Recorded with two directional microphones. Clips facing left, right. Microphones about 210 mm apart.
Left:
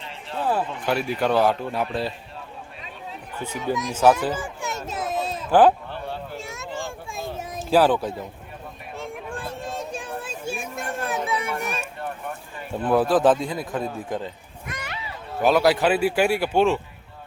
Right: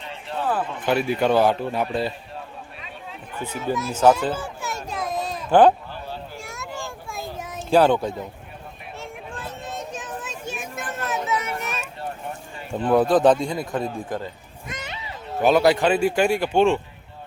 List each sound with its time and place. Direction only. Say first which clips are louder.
0.9 s speech: right 3 dB; centre (ahead or behind)
3.4 s speech: even; 15° left (ahead or behind)
4.4 s children playing: even; 20° left (ahead or behind)
5.5 s speech: right 1 dB; 5° left (ahead or behind)
6.3 s a sound: left 2 dB; centre (ahead or behind)
7.3 s children playing: left 1 dB; 30° left (ahead or behind)
7.7 s speech: right 1 dB; 5° left (ahead or behind)
9.6 s a sound: left 1 dB; 30° left (ahead or behind)
10.4 s children playing: left 3 dB; 10° left (ahead or behind)
11.0 s children playing: right 1 dB; 30° left (ahead or behind)
12.8 s speech: right 2 dB; centre (ahead or behind)
14.7 s children playing: even; 20° right (ahead or behind)
15.4 s speech: right 1 dB; centre (ahead or behind)